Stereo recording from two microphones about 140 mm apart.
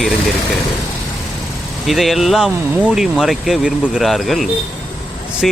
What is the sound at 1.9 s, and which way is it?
Speech, centre (ahead or behind).